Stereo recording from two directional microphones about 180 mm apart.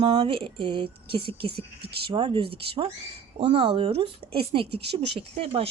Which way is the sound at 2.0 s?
25° right (ahead or behind).